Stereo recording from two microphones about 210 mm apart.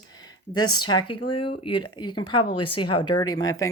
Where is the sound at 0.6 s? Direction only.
90° left.